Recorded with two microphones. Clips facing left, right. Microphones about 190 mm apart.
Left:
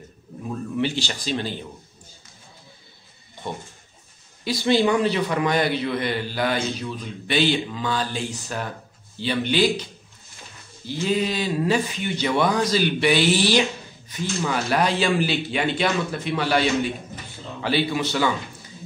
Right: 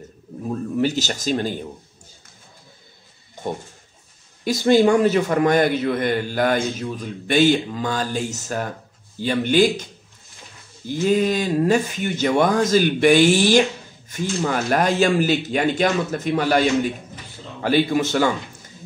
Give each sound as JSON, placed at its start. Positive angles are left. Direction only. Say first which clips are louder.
{"t": 0.4, "sound": "speech", "louder": "right 4 dB", "side_deg": -40}
{"t": 3.4, "sound": "a sound", "louder": "right 5 dB", "side_deg": -45}
{"t": 4.5, "sound": "speech", "louder": "right 4 dB", "side_deg": -45}
{"t": 10.9, "sound": "speech", "louder": "right 5 dB", "side_deg": -50}